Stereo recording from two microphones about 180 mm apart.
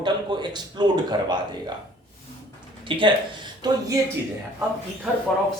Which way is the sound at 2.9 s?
30° right (ahead or behind).